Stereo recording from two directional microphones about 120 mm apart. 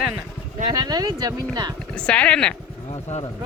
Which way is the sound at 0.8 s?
35° right (ahead or behind).